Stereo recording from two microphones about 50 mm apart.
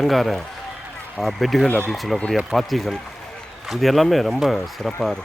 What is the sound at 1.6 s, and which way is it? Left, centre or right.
Speech, left.